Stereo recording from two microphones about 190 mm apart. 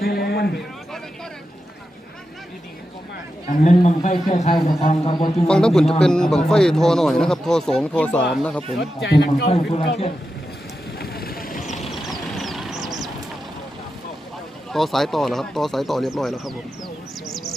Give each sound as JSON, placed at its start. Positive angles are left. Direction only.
{"t": 0.0, "sound": "a sound", "side_deg": 55}
{"t": 3.5, "sound": "a man's voice", "side_deg": 40}
{"t": 4.9, "sound": "speech", "side_deg": 25}
{"t": 5.5, "sound": "speech", "side_deg": 5}
{"t": 9.0, "sound": "a man's voice", "side_deg": 60}
{"t": 9.5, "sound": "a man's voice", "side_deg": 30}
{"t": 10.9, "sound": "vehicle", "side_deg": 55}
{"t": 11.8, "sound": "vehicle", "side_deg": 0}
{"t": 14.7, "sound": "speech", "side_deg": 0}